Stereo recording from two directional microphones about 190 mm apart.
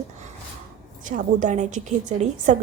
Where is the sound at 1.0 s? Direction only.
40° right (ahead or behind).